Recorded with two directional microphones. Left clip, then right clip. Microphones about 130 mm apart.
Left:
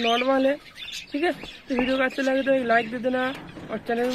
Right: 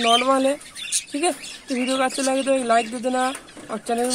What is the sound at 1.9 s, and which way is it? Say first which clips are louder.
Speech: right 3 dB; 15° right (ahead or behind).